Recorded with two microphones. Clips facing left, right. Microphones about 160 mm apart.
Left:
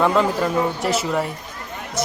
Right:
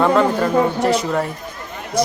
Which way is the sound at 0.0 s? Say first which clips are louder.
Right 3 dB; centre (ahead or behind).